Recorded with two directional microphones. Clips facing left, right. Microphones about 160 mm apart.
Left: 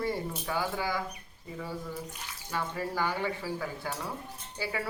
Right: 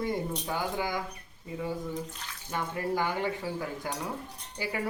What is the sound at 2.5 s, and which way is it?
Speech, 20° right (ahead or behind).